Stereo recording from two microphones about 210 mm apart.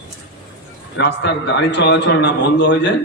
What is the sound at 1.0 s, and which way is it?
A man's voice, 55° left (ahead or behind).